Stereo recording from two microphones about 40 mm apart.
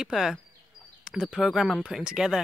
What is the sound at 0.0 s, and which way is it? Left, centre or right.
Speech, centre.